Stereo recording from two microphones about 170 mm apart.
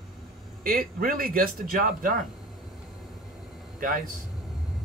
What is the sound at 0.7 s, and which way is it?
A man's voice, 60° right (ahead or behind).